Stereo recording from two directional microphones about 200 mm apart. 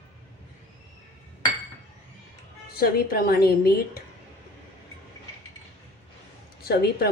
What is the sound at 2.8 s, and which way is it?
A woman's voice, 50° left (ahead or behind).